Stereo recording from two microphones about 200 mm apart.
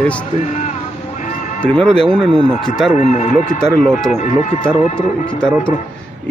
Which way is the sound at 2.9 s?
35° left (ahead or behind).